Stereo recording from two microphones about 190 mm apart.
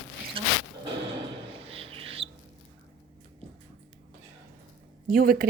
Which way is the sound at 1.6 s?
30° right (ahead or behind).